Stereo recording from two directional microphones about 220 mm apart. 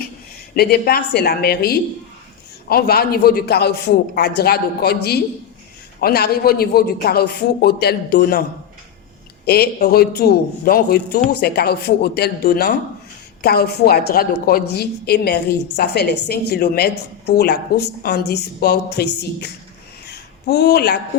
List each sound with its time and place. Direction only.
0.5 s a woman's voice: 45° left (ahead or behind)
9.5 s a woman's voice: 45° left (ahead or behind)
20.1 s a sound: 50° left (ahead or behind)